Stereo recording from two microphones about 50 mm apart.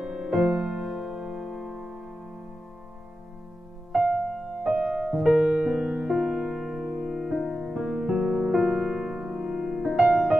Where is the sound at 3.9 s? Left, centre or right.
Centre.